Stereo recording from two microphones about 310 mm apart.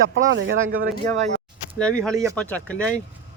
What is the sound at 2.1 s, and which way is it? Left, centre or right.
Speech, centre.